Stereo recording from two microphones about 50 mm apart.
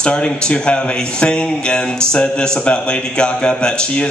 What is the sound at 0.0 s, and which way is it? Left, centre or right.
Speech, centre.